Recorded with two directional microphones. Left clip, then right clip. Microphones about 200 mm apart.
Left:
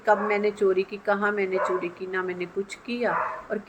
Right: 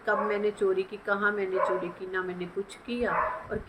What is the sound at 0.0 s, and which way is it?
Speech, 25° left (ahead or behind).